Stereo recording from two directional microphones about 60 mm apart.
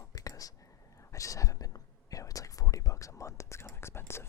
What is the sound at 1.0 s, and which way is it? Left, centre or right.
Whispering, left.